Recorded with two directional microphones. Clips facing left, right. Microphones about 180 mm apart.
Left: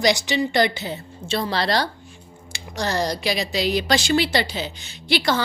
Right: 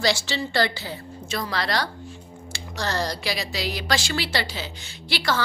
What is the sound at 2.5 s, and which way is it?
A woman's voice, 15° left (ahead or behind).